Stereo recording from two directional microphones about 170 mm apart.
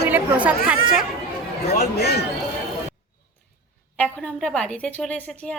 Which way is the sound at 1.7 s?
70° left (ahead or behind).